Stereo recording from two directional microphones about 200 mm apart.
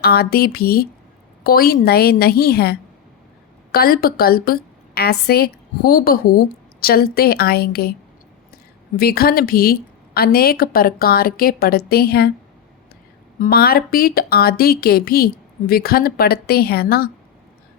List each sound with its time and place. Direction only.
0.0 s a woman's voice: 50° left (ahead or behind)
9.0 s a woman's voice: 50° left (ahead or behind)
13.4 s a woman's voice: 50° left (ahead or behind)